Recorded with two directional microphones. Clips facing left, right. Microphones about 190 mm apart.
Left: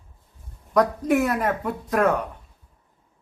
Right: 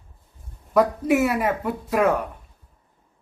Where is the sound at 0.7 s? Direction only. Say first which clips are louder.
Right 1 dB; 5° right (ahead or behind).